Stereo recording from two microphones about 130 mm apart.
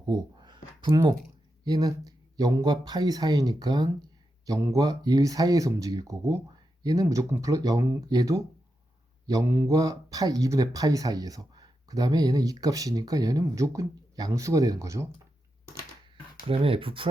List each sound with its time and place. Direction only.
0.1 s a sound: 35° right (ahead or behind)
1.6 s speech: 30° right (ahead or behind)
9.2 s mantra: 30° right (ahead or behind)
9.5 s speech: 20° right (ahead or behind)
16.5 s speech: 45° right (ahead or behind)